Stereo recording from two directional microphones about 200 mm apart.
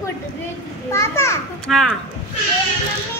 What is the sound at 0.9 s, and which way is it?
Children playing, 15° left (ahead or behind).